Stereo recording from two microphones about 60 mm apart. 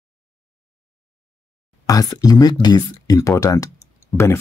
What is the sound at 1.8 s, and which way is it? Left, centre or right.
Speech, left.